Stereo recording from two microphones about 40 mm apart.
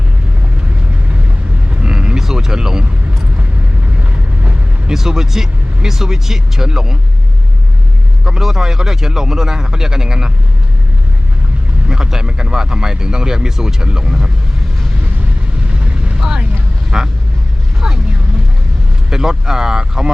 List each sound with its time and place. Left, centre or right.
1.7 s a sound: right
4.9 s speech: centre
8.2 s speech: centre
11.9 s speech: centre
15.8 s vehicle: right
16.9 s speech: centre
17.7 s vehicle: centre
19.1 s speech: centre